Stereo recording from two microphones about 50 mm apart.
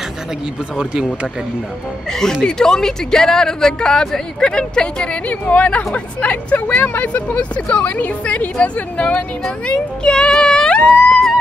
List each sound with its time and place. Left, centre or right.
2.4 s speech: centre